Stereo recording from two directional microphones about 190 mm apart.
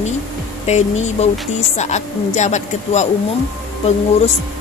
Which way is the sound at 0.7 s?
35° left (ahead or behind).